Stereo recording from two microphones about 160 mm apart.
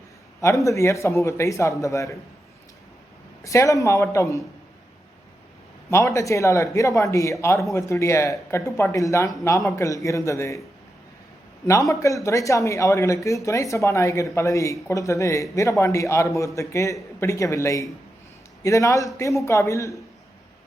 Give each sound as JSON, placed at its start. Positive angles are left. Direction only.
{"t": 0.6, "sound": "speech", "side_deg": 20}
{"t": 3.4, "sound": "speech", "side_deg": 20}
{"t": 5.9, "sound": "speech", "side_deg": 20}
{"t": 11.9, "sound": "speech", "side_deg": 20}